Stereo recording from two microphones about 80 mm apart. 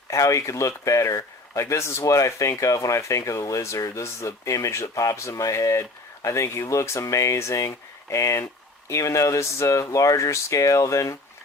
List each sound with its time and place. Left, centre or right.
0.1 s speech: left